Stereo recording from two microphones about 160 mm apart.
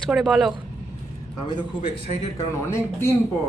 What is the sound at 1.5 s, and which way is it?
Speech, 35° left (ahead or behind).